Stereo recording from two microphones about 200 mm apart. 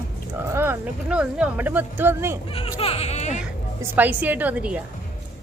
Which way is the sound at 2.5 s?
30° left (ahead or behind).